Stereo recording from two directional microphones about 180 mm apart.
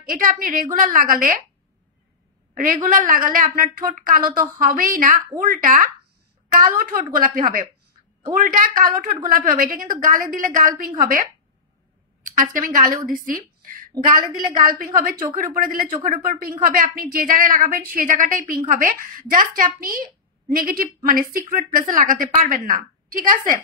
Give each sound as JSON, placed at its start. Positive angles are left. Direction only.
{"t": 0.0, "sound": "a woman's voice", "side_deg": -50}
{"t": 2.5, "sound": "a woman's voice", "side_deg": -50}